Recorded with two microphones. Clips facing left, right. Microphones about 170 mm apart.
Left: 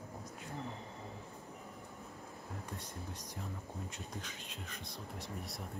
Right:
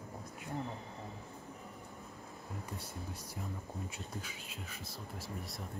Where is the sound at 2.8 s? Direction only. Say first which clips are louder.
Right 1 dB; 10° right (ahead or behind).